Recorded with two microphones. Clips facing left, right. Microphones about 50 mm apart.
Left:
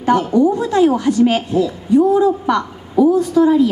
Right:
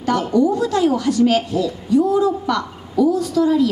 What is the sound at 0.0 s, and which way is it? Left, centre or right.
A woman's voice, left.